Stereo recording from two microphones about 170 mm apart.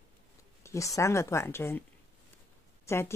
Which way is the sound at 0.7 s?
20° left (ahead or behind).